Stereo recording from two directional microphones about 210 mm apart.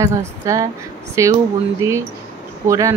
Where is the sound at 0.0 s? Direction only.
15° right (ahead or behind).